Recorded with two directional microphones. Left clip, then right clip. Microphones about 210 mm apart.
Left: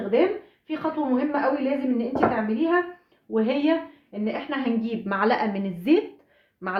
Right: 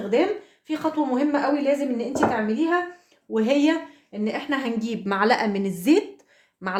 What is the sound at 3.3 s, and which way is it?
A woman's voice, 50° right (ahead or behind).